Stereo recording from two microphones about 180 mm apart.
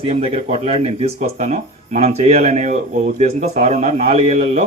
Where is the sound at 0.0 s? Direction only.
35° right (ahead or behind).